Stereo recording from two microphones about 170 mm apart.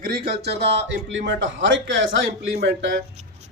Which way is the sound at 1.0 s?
90° right.